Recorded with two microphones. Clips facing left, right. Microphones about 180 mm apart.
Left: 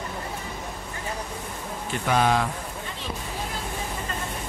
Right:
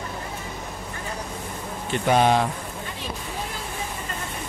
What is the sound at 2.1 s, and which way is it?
Speech, 25° right (ahead or behind).